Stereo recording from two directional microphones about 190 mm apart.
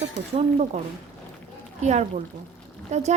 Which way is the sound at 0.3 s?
35° right (ahead or behind).